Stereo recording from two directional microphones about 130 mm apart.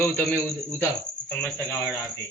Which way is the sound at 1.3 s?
20° left (ahead or behind).